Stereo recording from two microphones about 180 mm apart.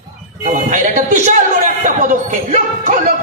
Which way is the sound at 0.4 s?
45° right (ahead or behind).